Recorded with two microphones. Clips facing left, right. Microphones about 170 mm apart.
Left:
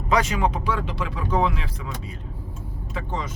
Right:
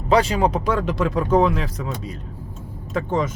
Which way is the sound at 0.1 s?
30° right (ahead or behind).